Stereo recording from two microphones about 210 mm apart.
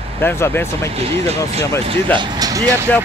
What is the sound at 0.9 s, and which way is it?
Speech, 30° right (ahead or behind).